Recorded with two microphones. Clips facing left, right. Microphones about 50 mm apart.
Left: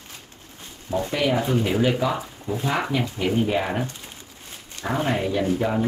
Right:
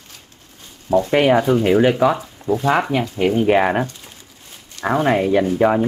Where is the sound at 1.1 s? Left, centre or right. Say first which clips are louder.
Right 8 dB; right.